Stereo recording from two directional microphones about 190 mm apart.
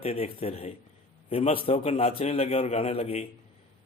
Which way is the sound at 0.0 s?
30° left (ahead or behind).